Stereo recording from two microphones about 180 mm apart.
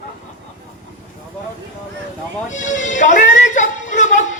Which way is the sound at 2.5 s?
45° left (ahead or behind).